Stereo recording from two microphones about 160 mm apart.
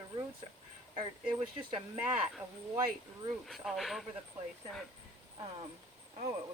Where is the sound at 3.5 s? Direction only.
Centre (ahead or behind).